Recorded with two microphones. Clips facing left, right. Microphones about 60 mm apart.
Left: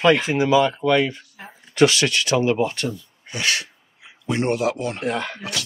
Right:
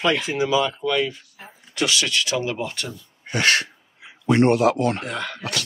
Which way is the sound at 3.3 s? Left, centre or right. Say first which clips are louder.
Right 4 dB; right.